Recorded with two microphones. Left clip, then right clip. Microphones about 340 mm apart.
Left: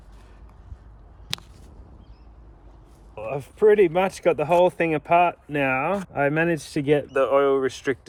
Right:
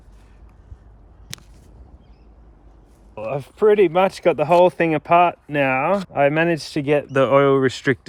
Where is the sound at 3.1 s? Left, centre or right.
Right.